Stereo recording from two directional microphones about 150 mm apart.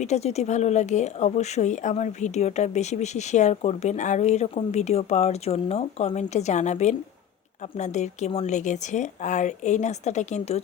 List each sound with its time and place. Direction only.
0.0 s speech: 45° left (ahead or behind)